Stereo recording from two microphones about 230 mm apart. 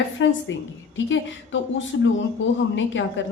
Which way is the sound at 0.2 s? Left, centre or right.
Left.